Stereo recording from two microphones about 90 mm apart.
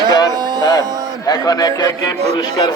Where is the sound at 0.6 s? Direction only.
40° left (ahead or behind).